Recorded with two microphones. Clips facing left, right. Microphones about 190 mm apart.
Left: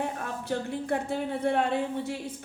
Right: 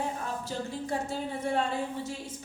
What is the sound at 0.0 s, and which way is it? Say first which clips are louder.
A woman's voice: left 1 dB; 60° left (ahead or behind).